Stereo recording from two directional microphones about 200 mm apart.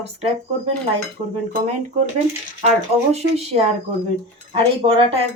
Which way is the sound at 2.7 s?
30° right (ahead or behind).